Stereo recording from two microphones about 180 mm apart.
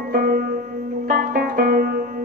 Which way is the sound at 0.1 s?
55° right (ahead or behind).